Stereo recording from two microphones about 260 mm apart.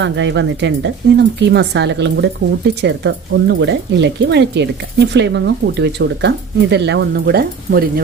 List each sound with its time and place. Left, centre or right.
0.0 s speech: right